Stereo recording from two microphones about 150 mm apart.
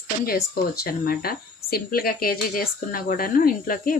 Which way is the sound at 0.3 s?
90° left.